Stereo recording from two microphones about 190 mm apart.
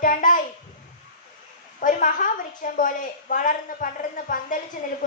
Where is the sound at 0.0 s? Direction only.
45° left (ahead or behind).